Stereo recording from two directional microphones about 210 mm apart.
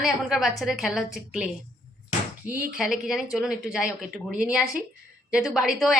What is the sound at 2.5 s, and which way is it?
Speech, 5° right (ahead or behind).